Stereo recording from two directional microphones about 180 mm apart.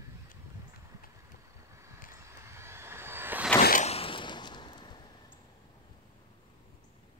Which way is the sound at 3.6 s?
50° left (ahead or behind).